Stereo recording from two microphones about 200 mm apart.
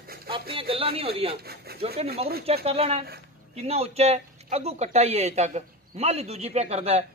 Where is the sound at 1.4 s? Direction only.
50° right (ahead or behind).